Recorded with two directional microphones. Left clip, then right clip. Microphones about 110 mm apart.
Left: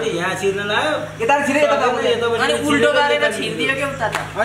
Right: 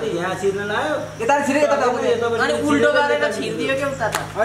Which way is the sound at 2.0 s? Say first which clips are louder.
Left 1 dB; 10° left (ahead or behind).